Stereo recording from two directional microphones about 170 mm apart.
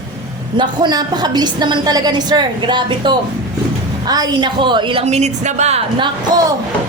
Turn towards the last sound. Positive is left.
turn(degrees=-20)  # may be behind; listen again after turning